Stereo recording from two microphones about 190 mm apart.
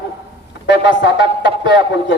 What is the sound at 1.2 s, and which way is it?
Speech, 25° right (ahead or behind).